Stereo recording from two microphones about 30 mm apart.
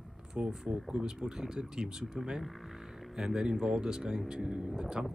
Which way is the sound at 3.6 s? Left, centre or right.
Right.